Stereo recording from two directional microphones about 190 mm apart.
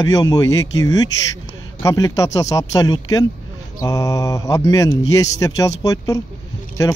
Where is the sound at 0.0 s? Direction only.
20° left (ahead or behind).